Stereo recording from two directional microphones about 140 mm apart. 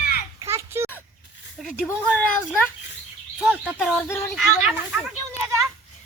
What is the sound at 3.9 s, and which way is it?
Speech, 15° left (ahead or behind).